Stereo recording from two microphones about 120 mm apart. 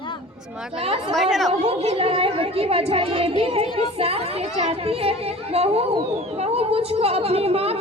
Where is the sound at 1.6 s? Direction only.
55° right (ahead or behind).